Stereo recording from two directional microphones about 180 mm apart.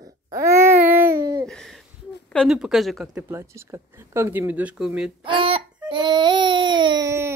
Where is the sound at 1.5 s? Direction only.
Centre (ahead or behind).